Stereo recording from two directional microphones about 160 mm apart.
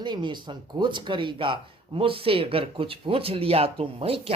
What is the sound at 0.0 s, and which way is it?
Speech, 30° right (ahead or behind).